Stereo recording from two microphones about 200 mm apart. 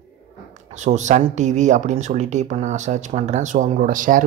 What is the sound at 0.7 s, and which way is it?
Speech, 35° right (ahead or behind).